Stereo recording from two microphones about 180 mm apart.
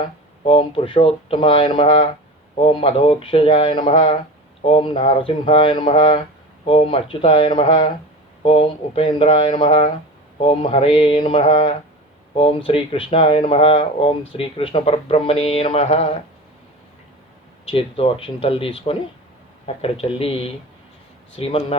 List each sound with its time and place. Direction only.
0.0 s speech: 30° left (ahead or behind)
17.7 s speech: 35° left (ahead or behind)
21.3 s speech: 35° left (ahead or behind)